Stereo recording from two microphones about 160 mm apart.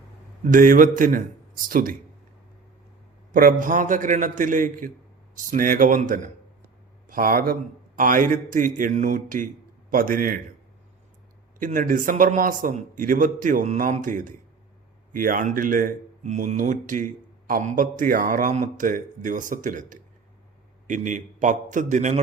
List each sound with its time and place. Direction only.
0.5 s speech: 55° right (ahead or behind)
3.3 s speech: 60° right (ahead or behind)
11.6 s a man's voice: 55° right (ahead or behind)